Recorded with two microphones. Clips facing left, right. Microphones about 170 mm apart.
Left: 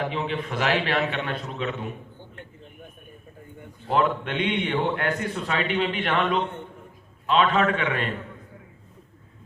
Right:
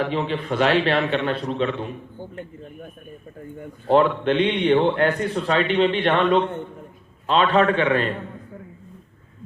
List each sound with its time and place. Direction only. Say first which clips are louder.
0.1 s a man's voice: right 4 dB; 35° right (ahead or behind)
3.9 s a man's voice: right 6 dB; 30° right (ahead or behind)